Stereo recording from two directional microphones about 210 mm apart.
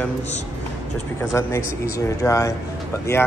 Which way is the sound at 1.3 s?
15° left (ahead or behind).